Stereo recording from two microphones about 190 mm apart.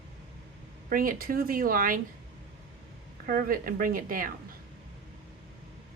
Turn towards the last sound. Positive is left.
turn(degrees=-45)  # may be behind; listen again after turning